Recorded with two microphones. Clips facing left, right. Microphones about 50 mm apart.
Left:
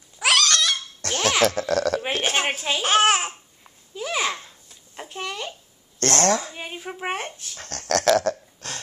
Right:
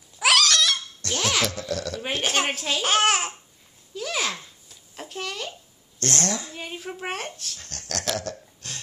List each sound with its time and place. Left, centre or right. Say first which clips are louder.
0.2 s cat: even; centre
1.0 s music: left 3 dB; left
1.4 s speech: left 7 dB; left
2.2 s speech: left 1 dB; centre
3.9 s babbling: left 2 dB; centre
5.9 s speech: left 7 dB; left
6.5 s speech: left 1 dB; centre
7.5 s a sound: left 10 dB; left